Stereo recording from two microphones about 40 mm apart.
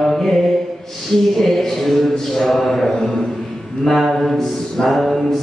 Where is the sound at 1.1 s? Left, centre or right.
Centre.